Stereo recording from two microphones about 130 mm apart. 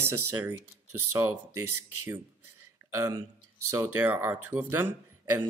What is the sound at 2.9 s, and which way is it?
Speech, 20° right (ahead or behind).